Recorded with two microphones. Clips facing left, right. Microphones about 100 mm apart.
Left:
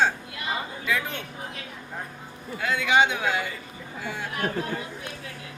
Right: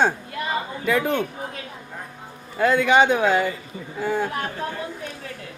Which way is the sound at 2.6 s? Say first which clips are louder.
Right 5 dB; 45° right (ahead or behind).